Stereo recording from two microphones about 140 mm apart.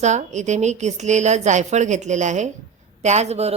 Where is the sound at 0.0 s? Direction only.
55° right (ahead or behind).